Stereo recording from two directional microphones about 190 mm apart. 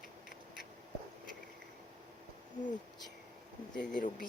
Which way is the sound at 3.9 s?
45° left (ahead or behind).